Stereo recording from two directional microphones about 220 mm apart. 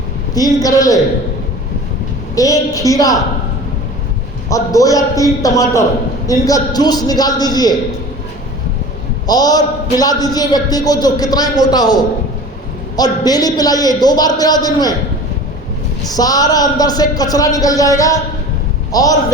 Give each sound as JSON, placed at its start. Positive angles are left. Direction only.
{"t": 0.3, "sound": "a man's voice", "side_deg": 15}
{"t": 2.3, "sound": "a man's voice", "side_deg": 15}
{"t": 4.4, "sound": "a man's voice", "side_deg": 15}
{"t": 9.2, "sound": "a man's voice", "side_deg": 15}
{"t": 16.0, "sound": "a man's voice", "side_deg": 15}